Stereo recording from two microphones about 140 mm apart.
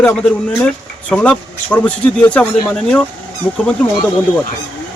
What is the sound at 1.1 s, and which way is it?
A man's voice, 10° left (ahead or behind).